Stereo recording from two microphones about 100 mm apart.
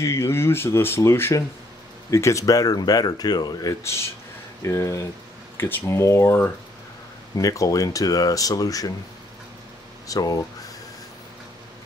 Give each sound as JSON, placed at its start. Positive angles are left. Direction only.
{"t": 0.0, "sound": "speech", "side_deg": 30}
{"t": 3.8, "sound": "speech", "side_deg": 25}
{"t": 7.3, "sound": "speech", "side_deg": 35}
{"t": 10.0, "sound": "speech", "side_deg": 35}